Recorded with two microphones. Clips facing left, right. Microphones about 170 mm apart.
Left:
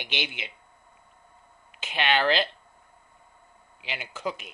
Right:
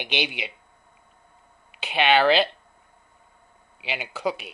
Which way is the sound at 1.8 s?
15° right (ahead or behind).